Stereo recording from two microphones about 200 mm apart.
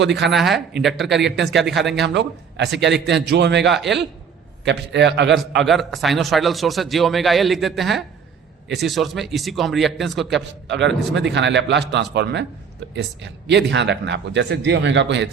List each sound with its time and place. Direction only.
0.0 s speech: 60° right (ahead or behind)
0.3 s a man's voice: centre (ahead or behind)
1.0 s speech: 60° right (ahead or behind)
3.7 s a man's voice: centre (ahead or behind)
4.6 s speech: 60° right (ahead or behind)
5.6 s a man's voice: centre (ahead or behind)
10.7 s speech: 65° right (ahead or behind)